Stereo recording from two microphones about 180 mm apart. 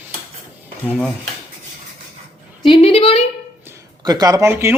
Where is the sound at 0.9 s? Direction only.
Centre (ahead or behind).